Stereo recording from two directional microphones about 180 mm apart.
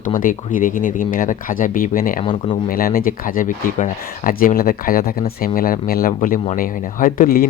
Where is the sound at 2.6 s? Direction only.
50° left (ahead or behind).